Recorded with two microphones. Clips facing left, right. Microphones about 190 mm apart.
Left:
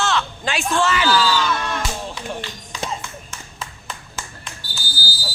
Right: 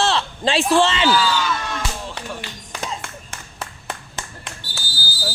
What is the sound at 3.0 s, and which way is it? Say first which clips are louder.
Clapping: even; 65° right (ahead or behind).